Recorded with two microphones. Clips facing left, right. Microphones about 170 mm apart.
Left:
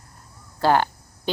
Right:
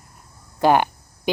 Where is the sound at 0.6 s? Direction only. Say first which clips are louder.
Right 2 dB; 15° right (ahead or behind).